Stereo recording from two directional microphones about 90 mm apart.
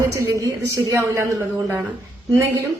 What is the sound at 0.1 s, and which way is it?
A woman's voice, 35° right (ahead or behind).